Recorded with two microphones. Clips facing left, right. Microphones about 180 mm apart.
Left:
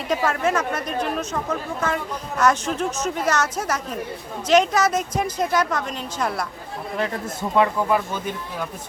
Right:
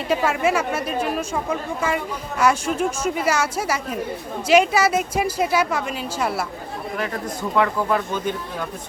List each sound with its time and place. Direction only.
0.1 s speech: 10° right (ahead or behind)
7.0 s a man's voice: 25° left (ahead or behind)
7.9 s speech: 10° left (ahead or behind)